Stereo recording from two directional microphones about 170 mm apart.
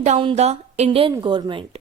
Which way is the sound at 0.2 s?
35° right (ahead or behind).